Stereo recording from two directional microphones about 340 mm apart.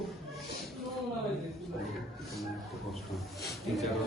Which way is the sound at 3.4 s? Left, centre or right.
Centre.